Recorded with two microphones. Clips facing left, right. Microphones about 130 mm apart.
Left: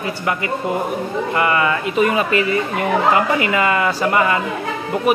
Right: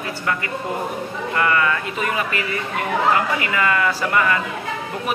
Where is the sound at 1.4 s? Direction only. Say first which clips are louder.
Left 1 dB; 20° left (ahead or behind).